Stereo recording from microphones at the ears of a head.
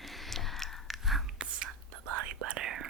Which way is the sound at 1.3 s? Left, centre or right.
Right.